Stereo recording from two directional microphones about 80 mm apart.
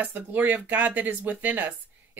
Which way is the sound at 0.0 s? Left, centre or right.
Right.